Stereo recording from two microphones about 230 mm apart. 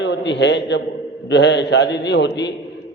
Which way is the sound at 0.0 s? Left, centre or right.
Left.